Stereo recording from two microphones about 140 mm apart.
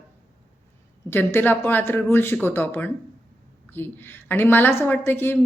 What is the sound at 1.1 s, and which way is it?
A woman's voice, 15° left (ahead or behind).